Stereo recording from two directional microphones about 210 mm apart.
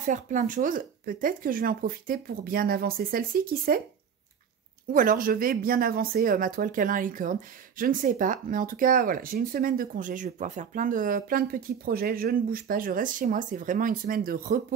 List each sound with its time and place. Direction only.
0.0 s speech: 35° right (ahead or behind)
4.9 s speech: 40° right (ahead or behind)